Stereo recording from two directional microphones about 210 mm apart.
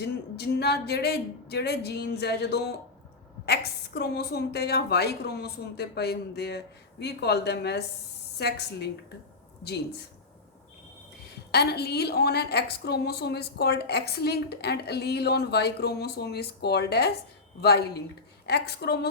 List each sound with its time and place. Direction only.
0.0 s a woman's voice: 50° left (ahead or behind)
11.5 s a woman's voice: 50° left (ahead or behind)